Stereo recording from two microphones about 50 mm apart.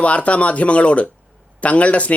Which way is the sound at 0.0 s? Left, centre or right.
Left.